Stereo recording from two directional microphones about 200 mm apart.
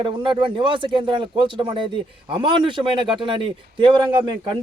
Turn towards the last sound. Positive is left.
turn(degrees=-25)  # may be behind; listen again after turning